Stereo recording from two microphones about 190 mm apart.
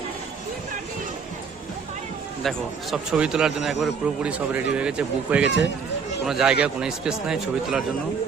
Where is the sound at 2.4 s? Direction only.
Centre (ahead or behind).